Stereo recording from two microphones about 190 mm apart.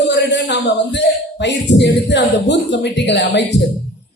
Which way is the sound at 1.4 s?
65° left (ahead or behind).